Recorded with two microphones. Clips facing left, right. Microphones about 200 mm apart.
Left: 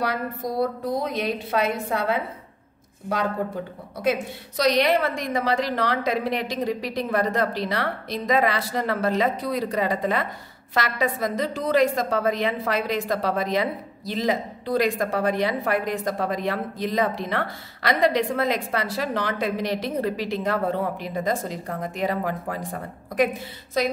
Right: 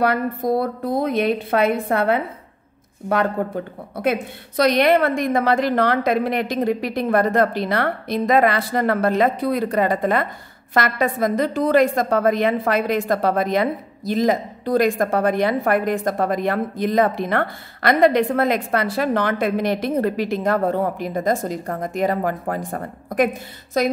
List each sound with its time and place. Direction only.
0.0 s a woman's voice: 55° right (ahead or behind)
3.9 s a woman's voice: 55° right (ahead or behind)